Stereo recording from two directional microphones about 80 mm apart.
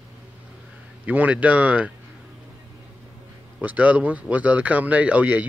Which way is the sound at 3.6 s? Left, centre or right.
Centre.